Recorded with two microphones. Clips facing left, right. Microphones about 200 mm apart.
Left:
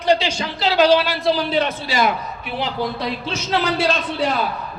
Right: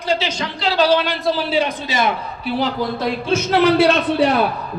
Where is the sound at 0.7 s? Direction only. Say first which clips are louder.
Left 1 dB; 15° left (ahead or behind).